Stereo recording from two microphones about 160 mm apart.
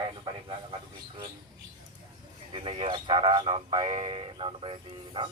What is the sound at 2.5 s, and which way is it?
Speech, 35° right (ahead or behind).